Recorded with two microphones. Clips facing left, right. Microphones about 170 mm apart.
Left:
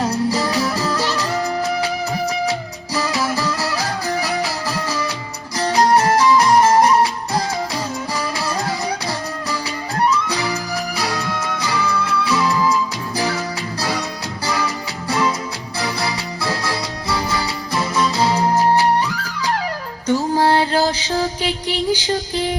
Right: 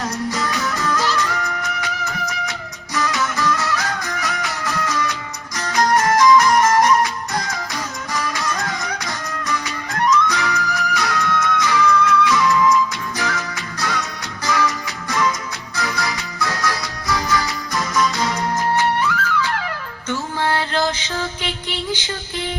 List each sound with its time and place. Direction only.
0.0 s music: 30° left (ahead or behind)
20.1 s mantra: 35° left (ahead or behind)